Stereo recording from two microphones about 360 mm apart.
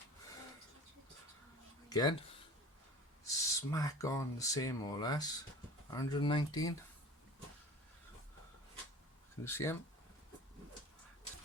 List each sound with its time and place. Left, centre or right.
1.9 s speech: centre
3.2 s speech: centre
9.4 s speech: centre